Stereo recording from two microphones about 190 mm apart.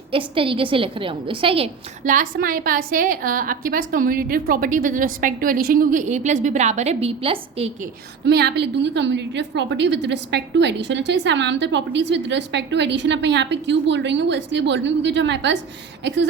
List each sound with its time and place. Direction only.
0.1 s a woman's voice: 30° right (ahead or behind)
2.0 s a woman's voice: 45° right (ahead or behind)
8.2 s a woman's voice: 60° right (ahead or behind)